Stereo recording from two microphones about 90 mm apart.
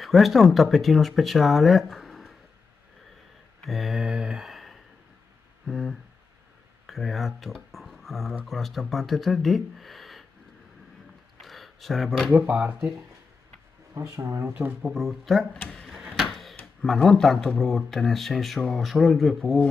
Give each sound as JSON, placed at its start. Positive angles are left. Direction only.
{"t": 0.0, "sound": "speech", "side_deg": 0}
{"t": 3.6, "sound": "mantra", "side_deg": 0}
{"t": 5.7, "sound": "speech", "side_deg": 0}
{"t": 11.4, "sound": "a sound", "side_deg": 0}
{"t": 12.3, "sound": "speech", "side_deg": -15}
{"t": 13.9, "sound": "speech", "side_deg": -30}
{"t": 14.8, "sound": "speech", "side_deg": -5}
{"t": 15.7, "sound": "a sound", "side_deg": 0}
{"t": 16.8, "sound": "speech", "side_deg": 5}